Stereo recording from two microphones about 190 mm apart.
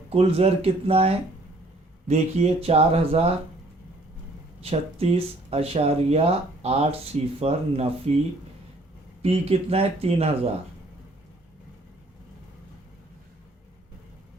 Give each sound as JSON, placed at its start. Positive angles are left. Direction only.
{"t": 0.1, "sound": "speech", "side_deg": -30}
{"t": 4.6, "sound": "speech", "side_deg": -30}
{"t": 9.2, "sound": "speech", "side_deg": -35}